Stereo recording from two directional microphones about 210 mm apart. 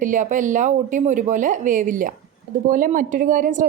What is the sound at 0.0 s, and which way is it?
A woman's voice, 35° right (ahead or behind).